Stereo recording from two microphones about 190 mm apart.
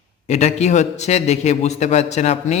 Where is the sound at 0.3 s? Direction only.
35° left (ahead or behind).